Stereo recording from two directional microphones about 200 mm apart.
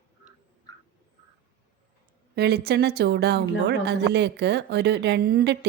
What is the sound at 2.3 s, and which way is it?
Speech, 55° right (ahead or behind).